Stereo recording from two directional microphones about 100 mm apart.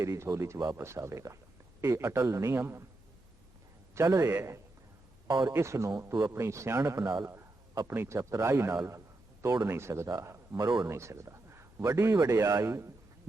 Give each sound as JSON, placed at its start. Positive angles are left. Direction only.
{"t": 0.0, "sound": "a man's voice", "side_deg": -30}
{"t": 3.9, "sound": "a man's voice", "side_deg": -35}
{"t": 5.3, "sound": "a man's voice", "side_deg": -40}
{"t": 5.5, "sound": "a man's voice", "side_deg": -30}
{"t": 10.2, "sound": "a sound", "side_deg": -30}
{"t": 10.6, "sound": "speech", "side_deg": -50}
{"t": 10.8, "sound": "a man's voice", "side_deg": -30}